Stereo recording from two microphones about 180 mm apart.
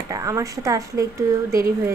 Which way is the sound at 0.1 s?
20° right (ahead or behind).